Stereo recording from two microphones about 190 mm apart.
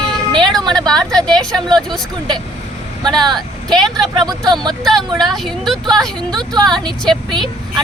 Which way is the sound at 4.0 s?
20° right (ahead or behind).